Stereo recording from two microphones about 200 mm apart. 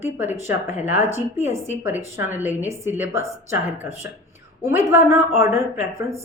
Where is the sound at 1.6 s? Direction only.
10° right (ahead or behind).